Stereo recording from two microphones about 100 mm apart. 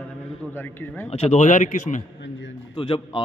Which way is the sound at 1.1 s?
90° left.